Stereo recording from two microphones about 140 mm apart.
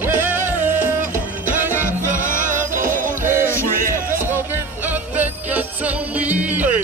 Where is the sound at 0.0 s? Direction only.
15° right (ahead or behind).